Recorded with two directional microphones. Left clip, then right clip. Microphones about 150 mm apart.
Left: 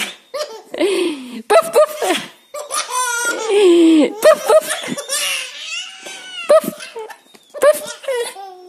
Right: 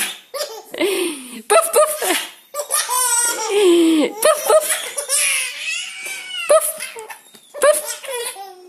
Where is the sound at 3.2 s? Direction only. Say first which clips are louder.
Left 4 dB; 35° left (ahead or behind).